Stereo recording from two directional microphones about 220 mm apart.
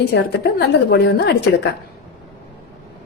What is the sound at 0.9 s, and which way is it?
Speech, 50° left (ahead or behind).